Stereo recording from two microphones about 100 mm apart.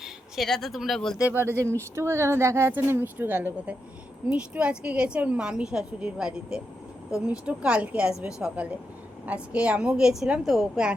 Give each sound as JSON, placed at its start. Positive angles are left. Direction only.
{"t": 0.0, "sound": "speech", "side_deg": 0}
{"t": 1.2, "sound": "a woman's voice", "side_deg": -20}